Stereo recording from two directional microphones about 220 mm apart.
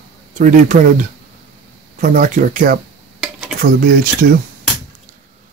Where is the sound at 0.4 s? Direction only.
35° right (ahead or behind).